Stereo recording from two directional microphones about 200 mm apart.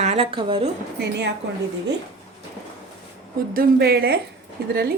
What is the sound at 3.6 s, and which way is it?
Speech, 50° right (ahead or behind).